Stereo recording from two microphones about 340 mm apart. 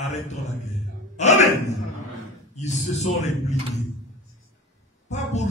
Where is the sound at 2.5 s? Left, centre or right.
Centre.